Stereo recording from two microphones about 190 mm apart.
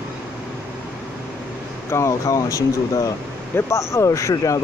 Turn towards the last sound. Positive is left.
turn(degrees=15)  # may be behind; listen again after turning